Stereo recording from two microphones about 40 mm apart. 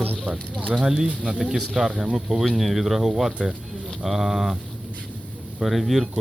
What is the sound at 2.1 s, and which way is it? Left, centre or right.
Speech, centre.